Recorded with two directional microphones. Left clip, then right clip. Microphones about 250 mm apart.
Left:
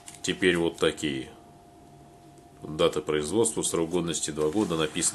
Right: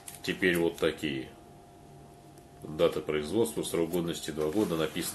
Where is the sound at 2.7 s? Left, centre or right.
Left.